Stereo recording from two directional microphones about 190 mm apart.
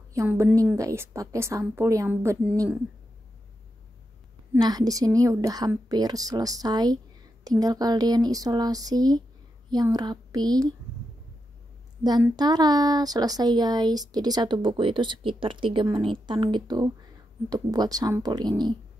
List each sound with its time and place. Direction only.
0.1 s a woman's voice: 15° right (ahead or behind)
4.6 s speech: 20° right (ahead or behind)
12.0 s speech: 20° right (ahead or behind)